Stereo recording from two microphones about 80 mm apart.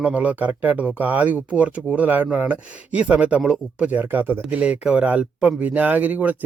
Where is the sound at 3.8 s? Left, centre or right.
Right.